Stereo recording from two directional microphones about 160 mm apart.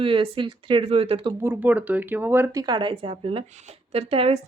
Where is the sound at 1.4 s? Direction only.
10° right (ahead or behind).